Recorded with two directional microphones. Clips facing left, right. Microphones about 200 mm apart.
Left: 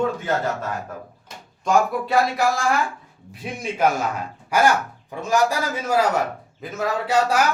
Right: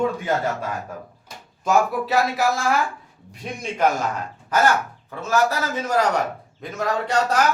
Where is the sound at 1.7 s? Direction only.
Centre (ahead or behind).